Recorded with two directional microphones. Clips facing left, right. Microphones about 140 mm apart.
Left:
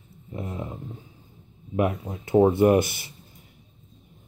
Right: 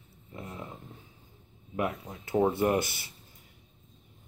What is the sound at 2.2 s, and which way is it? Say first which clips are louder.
Speech: left 8 dB; 20° left (ahead or behind).